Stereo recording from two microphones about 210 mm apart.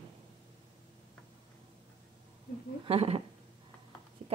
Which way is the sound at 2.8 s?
30° right (ahead or behind).